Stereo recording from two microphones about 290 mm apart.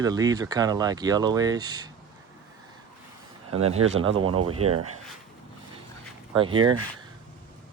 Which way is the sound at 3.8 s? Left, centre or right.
Right.